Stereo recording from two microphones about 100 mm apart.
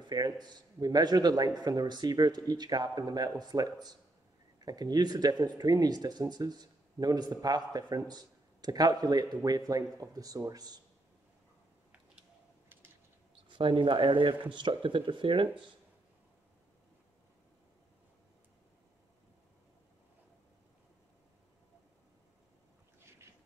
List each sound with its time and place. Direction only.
0.0 s a man's voice: 45° right (ahead or behind)
13.6 s speech: 55° right (ahead or behind)